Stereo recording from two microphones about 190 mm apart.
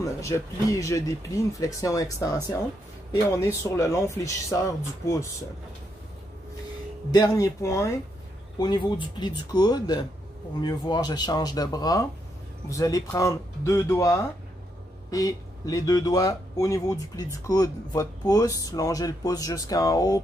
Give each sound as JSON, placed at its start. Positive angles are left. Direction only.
{"t": 0.0, "sound": "speech", "side_deg": 15}
{"t": 7.1, "sound": "speech", "side_deg": 20}